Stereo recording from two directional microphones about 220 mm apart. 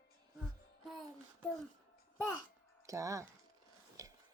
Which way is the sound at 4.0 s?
15° right (ahead or behind).